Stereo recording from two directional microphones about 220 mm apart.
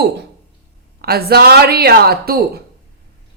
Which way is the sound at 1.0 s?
45° right (ahead or behind).